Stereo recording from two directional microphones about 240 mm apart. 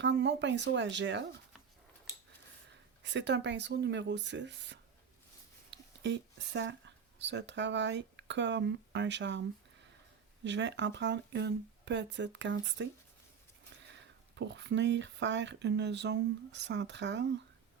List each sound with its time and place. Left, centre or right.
0.0 s speech: right
3.0 s speech: right
10.4 s speech: right
14.3 s speech: right